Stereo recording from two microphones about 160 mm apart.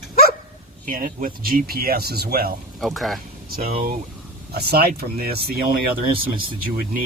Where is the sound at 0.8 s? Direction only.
55° right (ahead or behind); by 2.5 s 75° right (ahead or behind).